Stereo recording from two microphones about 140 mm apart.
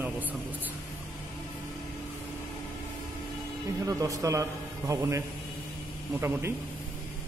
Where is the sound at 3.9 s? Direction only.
25° right (ahead or behind).